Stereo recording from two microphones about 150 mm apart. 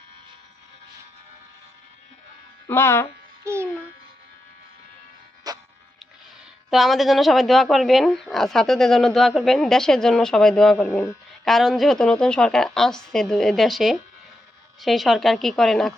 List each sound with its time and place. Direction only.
2.6 s speech: 15° left (ahead or behind)
3.4 s a child's voice: 15° right (ahead or behind)
5.5 s music: 25° right (ahead or behind)
6.7 s speech: centre (ahead or behind)
10.8 s speech: 15° left (ahead or behind)
11.4 s speech: centre (ahead or behind)